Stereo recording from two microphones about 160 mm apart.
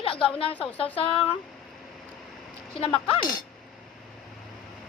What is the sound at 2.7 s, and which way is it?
Speech, 35° left (ahead or behind).